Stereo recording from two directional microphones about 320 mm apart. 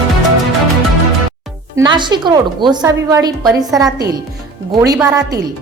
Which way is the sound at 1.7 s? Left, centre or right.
Centre.